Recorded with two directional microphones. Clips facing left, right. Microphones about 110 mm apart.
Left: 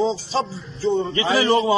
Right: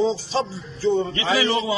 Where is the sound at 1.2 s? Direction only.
45° left (ahead or behind).